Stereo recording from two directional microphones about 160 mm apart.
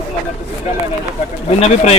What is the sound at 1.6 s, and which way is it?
Speech, 40° left (ahead or behind).